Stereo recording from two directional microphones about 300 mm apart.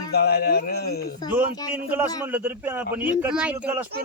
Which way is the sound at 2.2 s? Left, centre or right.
Centre.